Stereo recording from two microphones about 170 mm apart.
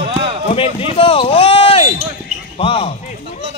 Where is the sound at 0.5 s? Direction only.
35° left (ahead or behind).